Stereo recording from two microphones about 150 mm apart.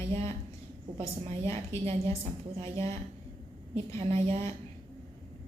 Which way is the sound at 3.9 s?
40° right (ahead or behind).